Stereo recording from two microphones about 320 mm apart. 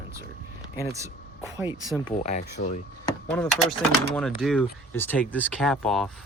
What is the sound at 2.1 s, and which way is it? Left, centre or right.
Speech, centre.